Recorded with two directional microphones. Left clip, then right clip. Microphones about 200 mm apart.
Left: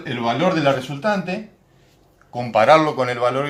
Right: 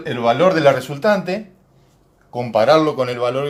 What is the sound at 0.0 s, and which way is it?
Speech, 20° right (ahead or behind).